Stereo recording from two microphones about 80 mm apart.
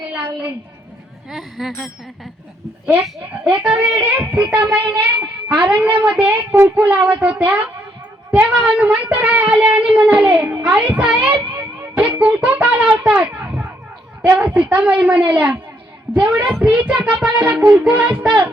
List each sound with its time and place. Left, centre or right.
1.3 s speech: centre
3.5 s child singing: centre
6.2 s child singing: right